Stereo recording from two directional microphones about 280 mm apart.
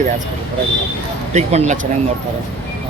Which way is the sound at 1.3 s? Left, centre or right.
Right.